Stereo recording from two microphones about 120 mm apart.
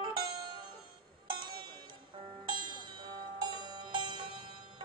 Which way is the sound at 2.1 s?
45° right (ahead or behind).